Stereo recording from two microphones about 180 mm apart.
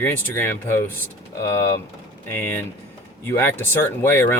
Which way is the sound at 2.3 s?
15° left (ahead or behind).